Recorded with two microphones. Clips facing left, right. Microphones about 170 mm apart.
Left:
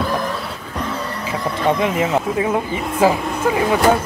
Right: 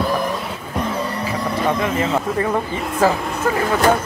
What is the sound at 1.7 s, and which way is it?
Speech, 20° left (ahead or behind).